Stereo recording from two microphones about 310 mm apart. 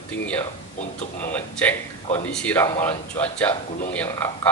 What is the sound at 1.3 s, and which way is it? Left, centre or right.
A man's voice, centre.